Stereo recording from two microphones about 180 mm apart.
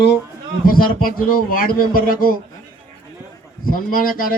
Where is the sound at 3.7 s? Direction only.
50° left (ahead or behind).